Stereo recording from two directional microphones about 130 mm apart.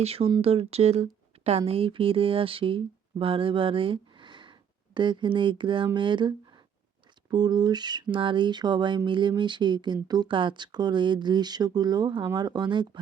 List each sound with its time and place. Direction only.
0.0 s speech: 50° right (ahead or behind)